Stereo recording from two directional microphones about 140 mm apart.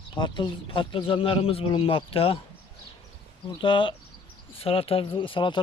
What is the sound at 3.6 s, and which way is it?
Speech, 40° left (ahead or behind).